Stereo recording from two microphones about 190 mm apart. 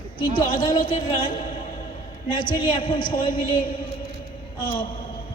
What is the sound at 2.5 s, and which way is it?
A man's voice, 25° left (ahead or behind).